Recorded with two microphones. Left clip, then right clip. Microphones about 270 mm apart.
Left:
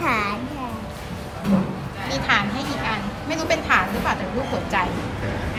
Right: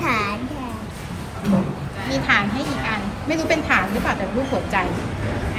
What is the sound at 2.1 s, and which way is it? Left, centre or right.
A woman's voice, centre.